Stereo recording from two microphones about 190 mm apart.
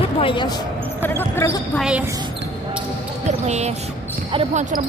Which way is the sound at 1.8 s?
5° right (ahead or behind).